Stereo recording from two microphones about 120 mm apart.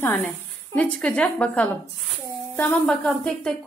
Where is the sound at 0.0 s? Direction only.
20° left (ahead or behind).